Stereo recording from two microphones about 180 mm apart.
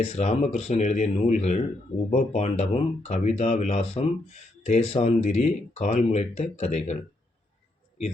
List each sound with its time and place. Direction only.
0.0 s speech: 35° left (ahead or behind)